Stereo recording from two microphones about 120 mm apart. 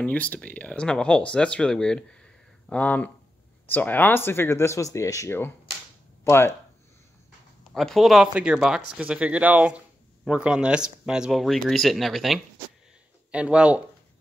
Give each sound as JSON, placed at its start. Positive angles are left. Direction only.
{"t": 0.0, "sound": "speech", "side_deg": 10}
{"t": 7.7, "sound": "speech", "side_deg": 0}